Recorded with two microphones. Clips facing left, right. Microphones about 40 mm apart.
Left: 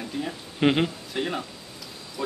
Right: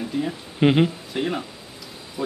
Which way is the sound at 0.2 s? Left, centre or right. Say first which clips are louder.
Right 3 dB; centre.